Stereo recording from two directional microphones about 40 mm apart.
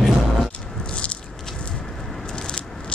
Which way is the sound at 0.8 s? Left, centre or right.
Left.